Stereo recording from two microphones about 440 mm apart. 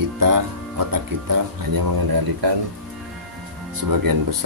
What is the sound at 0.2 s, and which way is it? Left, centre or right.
Speech, right.